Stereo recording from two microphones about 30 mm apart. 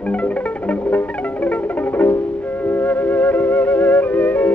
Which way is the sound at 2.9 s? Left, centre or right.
Left.